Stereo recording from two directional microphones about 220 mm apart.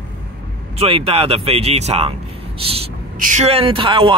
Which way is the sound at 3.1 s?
35° right (ahead or behind).